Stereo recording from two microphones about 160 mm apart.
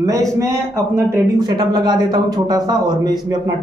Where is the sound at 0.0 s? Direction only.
20° right (ahead or behind).